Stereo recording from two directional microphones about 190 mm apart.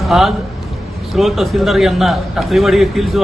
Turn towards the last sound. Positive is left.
turn(degrees=0)  # may be behind; listen again after turning